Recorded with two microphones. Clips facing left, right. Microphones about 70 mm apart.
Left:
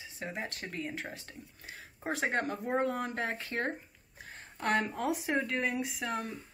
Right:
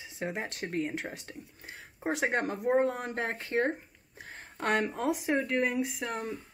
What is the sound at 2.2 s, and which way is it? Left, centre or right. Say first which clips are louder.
Speech: right 2 dB; right.